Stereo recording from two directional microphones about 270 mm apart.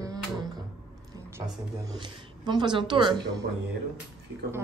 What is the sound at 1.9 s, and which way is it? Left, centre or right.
A woman's voice, centre.